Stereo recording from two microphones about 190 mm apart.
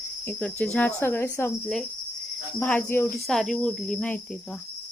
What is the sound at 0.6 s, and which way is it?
Speech, 5° left (ahead or behind).